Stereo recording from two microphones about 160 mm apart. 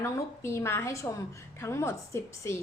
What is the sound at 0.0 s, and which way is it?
A woman's voice, 15° left (ahead or behind).